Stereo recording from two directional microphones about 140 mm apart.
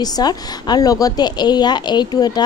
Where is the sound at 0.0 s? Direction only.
30° left (ahead or behind).